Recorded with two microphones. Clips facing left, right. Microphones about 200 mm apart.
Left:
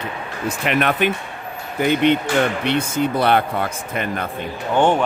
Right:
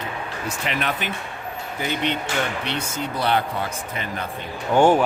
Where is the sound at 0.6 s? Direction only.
60° left (ahead or behind).